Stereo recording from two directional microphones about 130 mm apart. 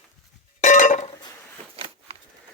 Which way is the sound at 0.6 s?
70° left (ahead or behind).